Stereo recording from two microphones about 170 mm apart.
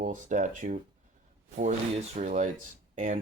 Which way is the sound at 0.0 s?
50° right (ahead or behind).